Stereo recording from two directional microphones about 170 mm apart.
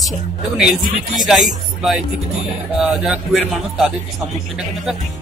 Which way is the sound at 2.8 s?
5° right (ahead or behind).